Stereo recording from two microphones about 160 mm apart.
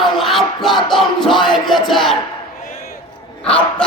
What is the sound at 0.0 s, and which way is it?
Music, centre (ahead or behind).